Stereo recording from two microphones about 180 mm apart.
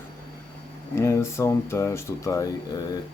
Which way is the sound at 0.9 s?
15° left (ahead or behind).